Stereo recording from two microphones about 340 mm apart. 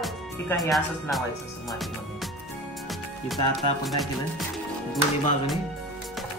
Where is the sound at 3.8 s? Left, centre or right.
Centre.